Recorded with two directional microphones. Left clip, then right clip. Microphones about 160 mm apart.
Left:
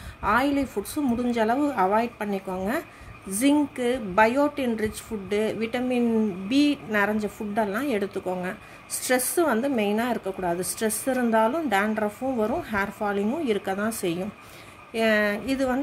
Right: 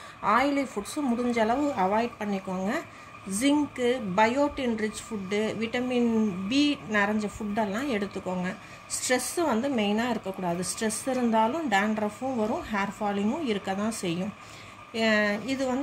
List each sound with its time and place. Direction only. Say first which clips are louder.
0.2 s a woman's voice: left 1 dB; 45° left (ahead or behind)